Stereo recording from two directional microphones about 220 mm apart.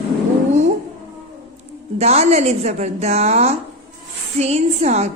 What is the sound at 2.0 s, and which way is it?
A woman's voice, 30° right (ahead or behind).